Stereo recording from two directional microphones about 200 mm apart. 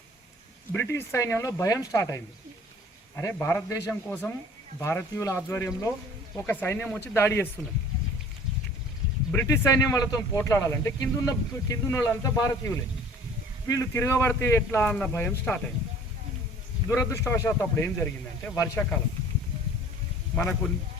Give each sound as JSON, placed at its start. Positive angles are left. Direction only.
{"t": 0.7, "sound": "speech", "side_deg": 10}
{"t": 9.3, "sound": "speech", "side_deg": 15}
{"t": 16.9, "sound": "speech", "side_deg": 15}
{"t": 20.3, "sound": "speech", "side_deg": 5}